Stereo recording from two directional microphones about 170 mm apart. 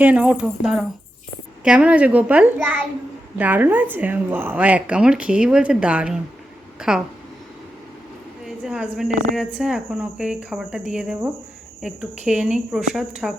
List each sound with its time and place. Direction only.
0.0 s a woman's voice: 10° right (ahead or behind)
8.4 s a woman's voice: 5° right (ahead or behind)